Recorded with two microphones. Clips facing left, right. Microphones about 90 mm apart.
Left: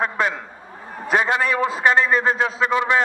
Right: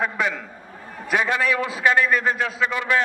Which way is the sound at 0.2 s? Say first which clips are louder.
Left 2 dB; 25° left (ahead or behind).